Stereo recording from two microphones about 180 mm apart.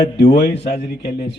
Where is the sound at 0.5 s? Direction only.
35° left (ahead or behind).